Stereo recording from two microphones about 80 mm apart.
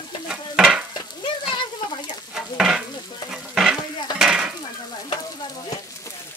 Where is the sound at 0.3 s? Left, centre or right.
Centre.